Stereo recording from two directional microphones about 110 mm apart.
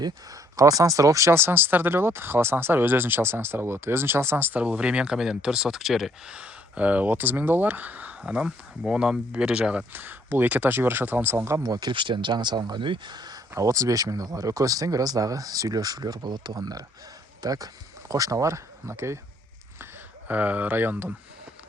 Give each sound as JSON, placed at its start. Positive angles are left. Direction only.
{"t": 0.0, "sound": "speech", "side_deg": -30}
{"t": 11.6, "sound": "speech", "side_deg": -40}
{"t": 13.5, "sound": "speech", "side_deg": -30}
{"t": 19.8, "sound": "speech", "side_deg": -15}